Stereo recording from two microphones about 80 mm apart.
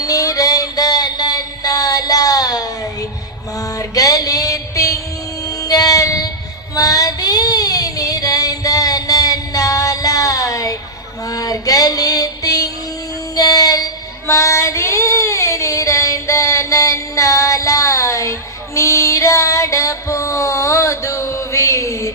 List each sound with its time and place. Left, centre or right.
0.0 s a sound: left
3.6 s mantra: left
5.5 s child singing: left
11.3 s music: left
13.3 s child singing: left
14.3 s child singing: left